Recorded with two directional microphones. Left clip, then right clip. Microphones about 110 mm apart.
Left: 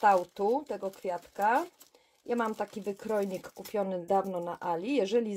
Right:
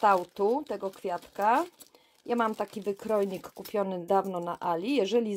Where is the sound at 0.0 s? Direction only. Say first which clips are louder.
Right 1 dB; 30° right (ahead or behind).